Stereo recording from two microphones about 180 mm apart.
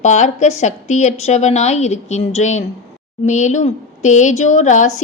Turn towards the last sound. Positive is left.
turn(degrees=45)  # may be behind; listen again after turning